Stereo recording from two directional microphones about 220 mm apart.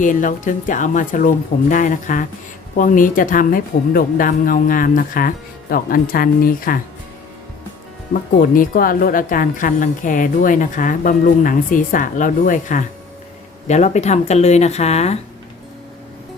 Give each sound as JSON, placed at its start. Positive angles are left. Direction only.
{"t": 0.0, "sound": "a woman's voice", "side_deg": 35}
{"t": 8.1, "sound": "a woman's voice", "side_deg": 40}